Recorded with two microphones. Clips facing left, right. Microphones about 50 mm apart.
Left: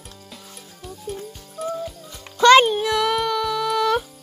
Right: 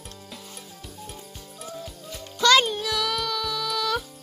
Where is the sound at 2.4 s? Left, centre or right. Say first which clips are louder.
Left 7 dB; left.